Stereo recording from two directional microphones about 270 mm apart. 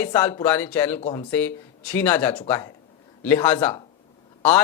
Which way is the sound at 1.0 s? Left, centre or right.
Centre.